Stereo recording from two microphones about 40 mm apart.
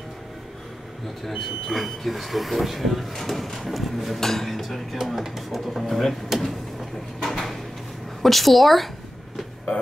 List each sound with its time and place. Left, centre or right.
1.2 s speech: centre
7.2 s a sound: centre
8.2 s speech: centre